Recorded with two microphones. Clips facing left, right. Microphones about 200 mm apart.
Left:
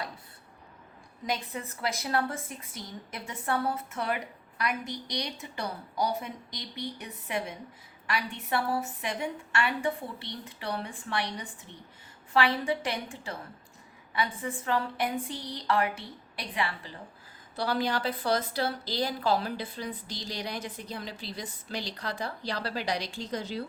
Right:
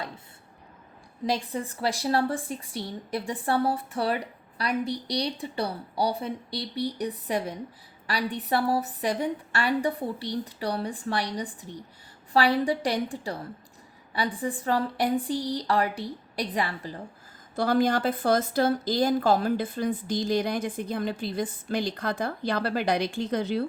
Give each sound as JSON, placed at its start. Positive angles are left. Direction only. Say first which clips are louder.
{"t": 1.3, "sound": "a woman's voice", "louder": "right 5 dB", "side_deg": -30}